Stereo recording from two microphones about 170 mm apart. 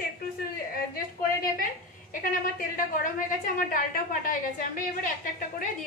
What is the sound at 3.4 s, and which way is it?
A woman's voice, 55° left (ahead or behind).